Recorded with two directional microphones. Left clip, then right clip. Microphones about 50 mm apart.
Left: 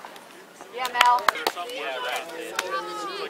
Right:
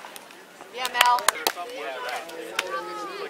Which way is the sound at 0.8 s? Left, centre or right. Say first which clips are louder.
Left 1 dB; right.